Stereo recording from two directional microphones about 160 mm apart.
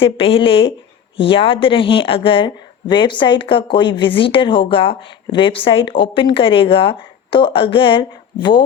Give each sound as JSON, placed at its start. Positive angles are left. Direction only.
{"t": 0.0, "sound": "a woman's voice", "side_deg": 35}